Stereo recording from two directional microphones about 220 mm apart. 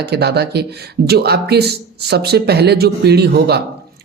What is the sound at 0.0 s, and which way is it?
Speech, 50° right (ahead or behind).